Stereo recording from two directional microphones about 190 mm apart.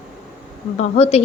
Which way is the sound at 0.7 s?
35° left (ahead or behind).